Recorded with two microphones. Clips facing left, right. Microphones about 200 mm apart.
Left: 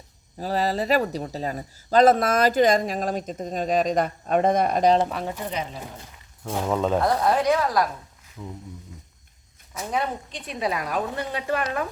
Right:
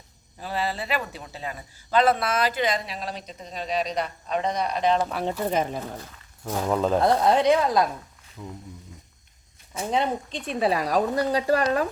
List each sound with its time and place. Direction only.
0.3 s a man's voice: 40° left (ahead or behind)
5.5 s a woman's voice: 50° right (ahead or behind)
6.5 s speech: centre (ahead or behind)
7.0 s a woman's voice: 25° right (ahead or behind)
8.4 s speech: 5° right (ahead or behind)
9.7 s a woman's voice: 25° right (ahead or behind)